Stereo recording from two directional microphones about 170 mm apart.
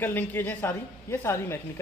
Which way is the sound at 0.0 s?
10° left (ahead or behind).